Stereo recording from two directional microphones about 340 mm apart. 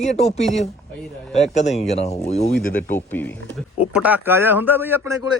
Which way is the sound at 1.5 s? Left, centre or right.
Centre.